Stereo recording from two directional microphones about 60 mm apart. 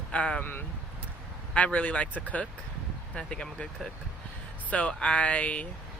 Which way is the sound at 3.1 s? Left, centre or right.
Centre.